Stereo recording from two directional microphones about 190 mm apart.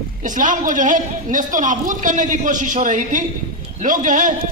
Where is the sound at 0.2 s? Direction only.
45° right (ahead or behind).